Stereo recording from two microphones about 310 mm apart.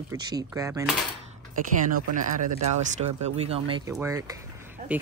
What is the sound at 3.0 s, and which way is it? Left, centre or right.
Speech, centre.